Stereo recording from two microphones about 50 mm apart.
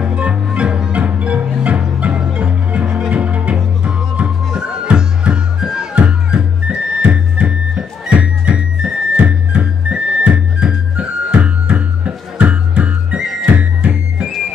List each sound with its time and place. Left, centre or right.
0.0 s music: right
4.6 s music: centre